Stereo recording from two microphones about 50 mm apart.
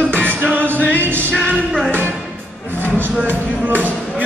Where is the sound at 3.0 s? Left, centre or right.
Right.